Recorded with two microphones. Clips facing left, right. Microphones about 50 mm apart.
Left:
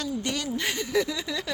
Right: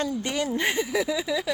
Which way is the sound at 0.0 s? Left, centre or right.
Centre.